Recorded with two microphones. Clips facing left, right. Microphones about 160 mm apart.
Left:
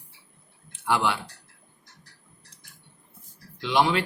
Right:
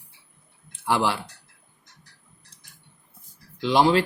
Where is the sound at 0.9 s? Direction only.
35° right (ahead or behind).